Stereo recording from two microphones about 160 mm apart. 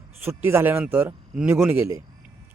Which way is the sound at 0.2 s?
15° right (ahead or behind).